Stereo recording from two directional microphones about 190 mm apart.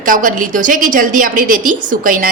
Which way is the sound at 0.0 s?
45° right (ahead or behind).